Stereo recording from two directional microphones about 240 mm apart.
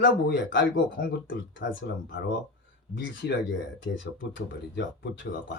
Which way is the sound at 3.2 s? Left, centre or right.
Left.